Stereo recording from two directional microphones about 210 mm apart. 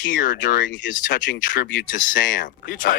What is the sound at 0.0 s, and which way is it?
Speech, 40° left (ahead or behind).